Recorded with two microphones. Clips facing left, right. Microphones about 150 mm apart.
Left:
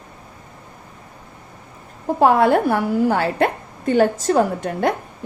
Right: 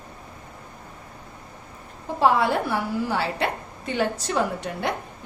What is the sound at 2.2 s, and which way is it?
A woman's voice, 50° left (ahead or behind).